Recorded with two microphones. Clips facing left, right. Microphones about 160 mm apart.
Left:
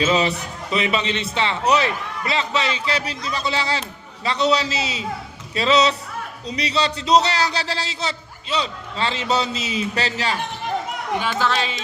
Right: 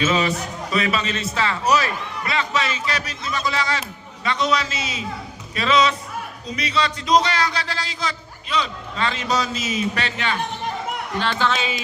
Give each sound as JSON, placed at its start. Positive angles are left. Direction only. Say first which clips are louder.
{"t": 0.0, "sound": "a man's voice", "louder": "left 1 dB", "side_deg": 30}
{"t": 11.2, "sound": "a man's voice", "louder": "right 1 dB", "side_deg": 5}